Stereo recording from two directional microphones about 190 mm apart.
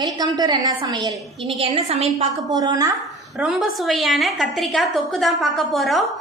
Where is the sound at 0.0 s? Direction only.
20° right (ahead or behind).